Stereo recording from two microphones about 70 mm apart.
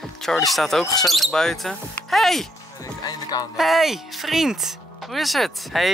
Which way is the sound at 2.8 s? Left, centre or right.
Left.